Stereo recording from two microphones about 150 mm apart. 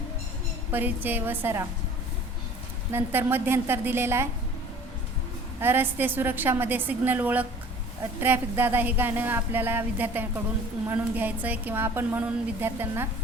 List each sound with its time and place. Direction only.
0.7 s speech: 15° right (ahead or behind)
2.9 s speech: 15° right (ahead or behind)
5.5 s speech: 15° right (ahead or behind)